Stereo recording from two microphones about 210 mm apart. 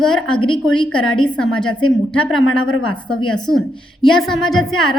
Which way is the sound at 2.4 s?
80° left.